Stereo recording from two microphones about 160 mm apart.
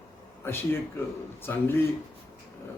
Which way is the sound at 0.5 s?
15° left (ahead or behind).